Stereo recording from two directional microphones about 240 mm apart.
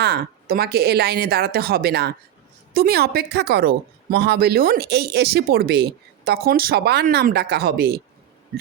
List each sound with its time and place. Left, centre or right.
0.0 s speech: right